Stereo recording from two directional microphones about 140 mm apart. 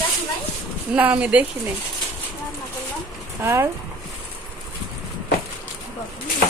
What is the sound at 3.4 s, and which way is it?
Speech, 20° right (ahead or behind).